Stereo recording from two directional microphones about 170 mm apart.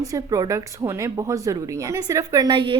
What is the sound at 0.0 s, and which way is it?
Speech, 20° right (ahead or behind).